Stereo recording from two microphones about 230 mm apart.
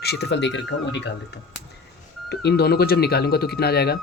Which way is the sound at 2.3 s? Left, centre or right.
Left.